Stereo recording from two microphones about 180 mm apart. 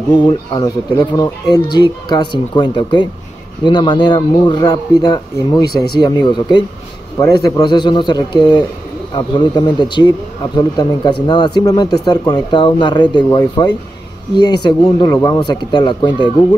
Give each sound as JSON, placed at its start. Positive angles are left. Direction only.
{"t": 0.3, "sound": "a man's voice", "side_deg": 25}